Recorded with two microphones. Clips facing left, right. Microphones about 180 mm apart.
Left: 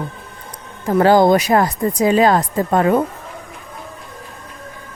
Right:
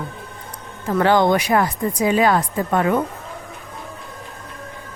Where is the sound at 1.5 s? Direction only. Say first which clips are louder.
Left 3 dB; 40° left (ahead or behind).